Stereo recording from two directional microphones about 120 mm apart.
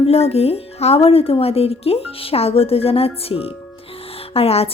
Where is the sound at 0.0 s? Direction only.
55° left (ahead or behind).